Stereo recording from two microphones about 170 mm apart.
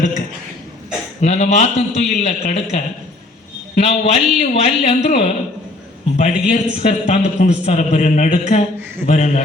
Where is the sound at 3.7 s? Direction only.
40° left (ahead or behind).